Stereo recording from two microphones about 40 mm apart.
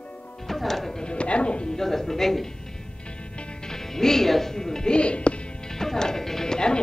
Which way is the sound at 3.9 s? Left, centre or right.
Centre.